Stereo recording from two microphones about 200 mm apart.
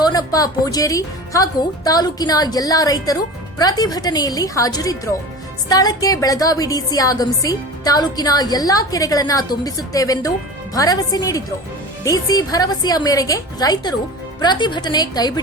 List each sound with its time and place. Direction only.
0.0 s a woman's voice: 20° left (ahead or behind)